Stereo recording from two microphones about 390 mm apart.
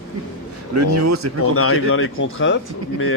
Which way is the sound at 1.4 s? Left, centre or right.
Left.